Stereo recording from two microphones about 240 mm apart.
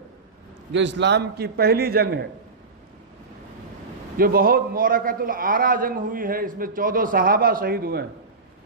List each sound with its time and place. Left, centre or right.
0.7 s a man's voice: right
4.2 s a man's voice: right